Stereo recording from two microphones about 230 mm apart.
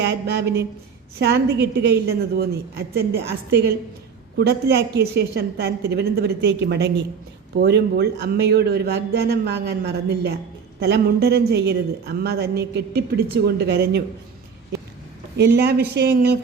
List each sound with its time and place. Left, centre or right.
0.0 s a woman's voice: right
15.4 s a woman's voice: right